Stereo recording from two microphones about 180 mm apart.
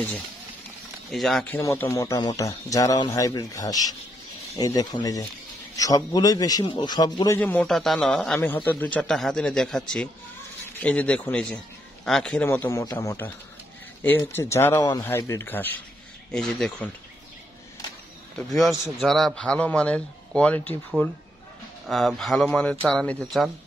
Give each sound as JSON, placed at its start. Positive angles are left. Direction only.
{"t": 1.1, "sound": "a man's voice", "side_deg": 0}
{"t": 1.6, "sound": "speech", "side_deg": 15}
{"t": 7.3, "sound": "a man's voice", "side_deg": 10}
{"t": 18.5, "sound": "a man's voice", "side_deg": 0}
{"t": 21.8, "sound": "a man's voice", "side_deg": 0}